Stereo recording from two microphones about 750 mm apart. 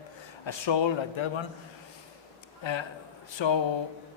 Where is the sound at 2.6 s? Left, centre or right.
Left.